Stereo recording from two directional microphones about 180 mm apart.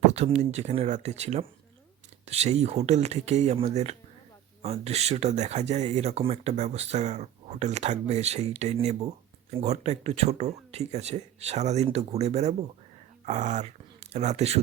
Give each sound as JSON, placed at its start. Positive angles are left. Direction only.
{"t": 0.1, "sound": "speech", "side_deg": -35}